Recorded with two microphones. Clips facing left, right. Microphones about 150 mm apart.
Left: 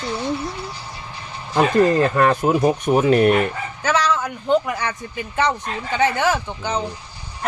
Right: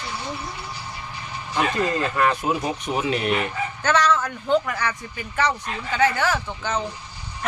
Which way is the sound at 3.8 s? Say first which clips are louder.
Left 1 dB; 10° left (ahead or behind).